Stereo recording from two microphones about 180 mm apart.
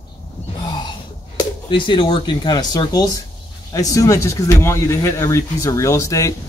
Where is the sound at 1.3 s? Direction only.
25° left (ahead or behind).